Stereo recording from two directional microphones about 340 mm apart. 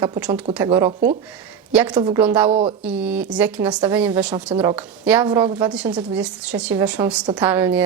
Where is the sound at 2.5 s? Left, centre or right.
Centre.